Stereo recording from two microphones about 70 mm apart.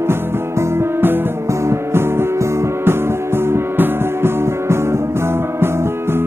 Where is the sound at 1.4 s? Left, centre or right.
Right.